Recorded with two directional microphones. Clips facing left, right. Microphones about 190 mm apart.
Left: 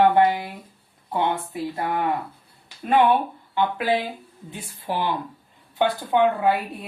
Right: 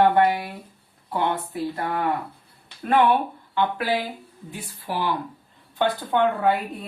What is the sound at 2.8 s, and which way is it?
Speech, 20° left (ahead or behind).